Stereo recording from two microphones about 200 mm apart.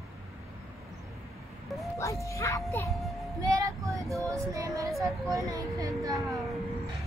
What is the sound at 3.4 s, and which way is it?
Child singing, 15° right (ahead or behind).